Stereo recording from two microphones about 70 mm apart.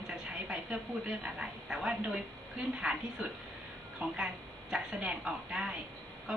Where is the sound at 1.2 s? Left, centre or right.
Centre.